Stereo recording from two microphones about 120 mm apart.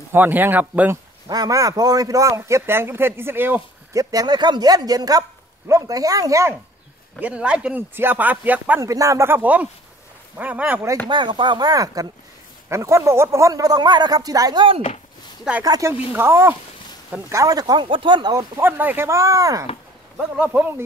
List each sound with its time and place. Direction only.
0.1 s speech: 15° right (ahead or behind)
1.3 s a man's voice: 30° right (ahead or behind)
7.2 s speech: 10° right (ahead or behind)
8.8 s a man's voice: 25° right (ahead or behind)
11.1 s chopping: 40° right (ahead or behind)
12.6 s a man's voice: 25° right (ahead or behind)
15.6 s chopping: 30° right (ahead or behind)
16.1 s a man's voice: 20° right (ahead or behind)
17.3 s chopping: 30° right (ahead or behind)
17.8 s chopping: 45° right (ahead or behind)
18.6 s a man's voice: 15° right (ahead or behind)
20.2 s speech: 10° right (ahead or behind)